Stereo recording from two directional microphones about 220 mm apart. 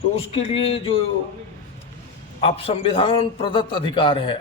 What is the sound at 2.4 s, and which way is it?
A man's voice, 25° left (ahead or behind).